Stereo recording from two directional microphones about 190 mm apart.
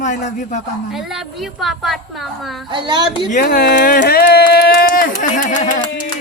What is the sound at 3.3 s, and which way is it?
Speech, 45° left (ahead or behind).